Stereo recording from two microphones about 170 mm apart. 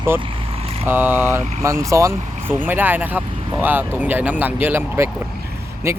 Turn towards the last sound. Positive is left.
turn(degrees=-15)  # may be behind; listen again after turning